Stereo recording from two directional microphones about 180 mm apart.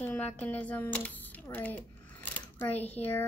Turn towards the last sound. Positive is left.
turn(degrees=10)  # may be behind; listen again after turning